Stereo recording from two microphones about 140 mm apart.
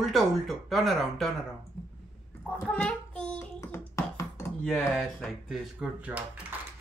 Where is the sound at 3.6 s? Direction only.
20° left (ahead or behind).